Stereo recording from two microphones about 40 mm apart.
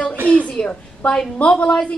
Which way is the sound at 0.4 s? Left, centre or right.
Left.